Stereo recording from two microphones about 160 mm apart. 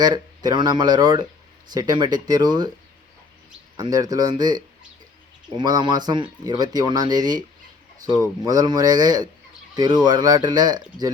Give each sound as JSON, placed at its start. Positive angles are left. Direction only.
{"t": 0.0, "sound": "speech", "side_deg": -25}
{"t": 3.8, "sound": "speech", "side_deg": -25}